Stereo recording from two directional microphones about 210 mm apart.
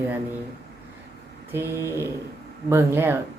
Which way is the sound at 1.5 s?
10° right (ahead or behind).